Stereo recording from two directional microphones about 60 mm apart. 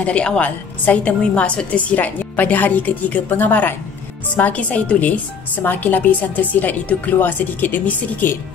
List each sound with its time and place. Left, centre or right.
0.0 s a woman's voice: centre